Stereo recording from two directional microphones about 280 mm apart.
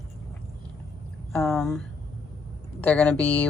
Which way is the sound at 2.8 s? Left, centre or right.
Centre.